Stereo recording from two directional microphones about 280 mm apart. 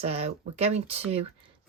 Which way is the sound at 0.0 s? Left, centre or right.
Right.